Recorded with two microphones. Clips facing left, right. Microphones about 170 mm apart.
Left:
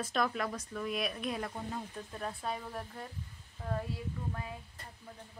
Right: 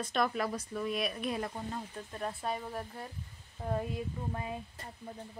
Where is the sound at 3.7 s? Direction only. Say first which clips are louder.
Right 3 dB; 25° right (ahead or behind).